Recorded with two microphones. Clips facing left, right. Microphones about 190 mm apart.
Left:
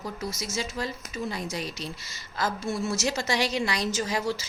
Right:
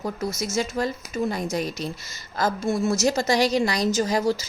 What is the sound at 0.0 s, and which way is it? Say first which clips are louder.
A woman's voice: right 6 dB; 50° right (ahead or behind).